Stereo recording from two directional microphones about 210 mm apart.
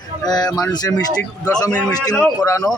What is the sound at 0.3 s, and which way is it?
Speech, 20° left (ahead or behind).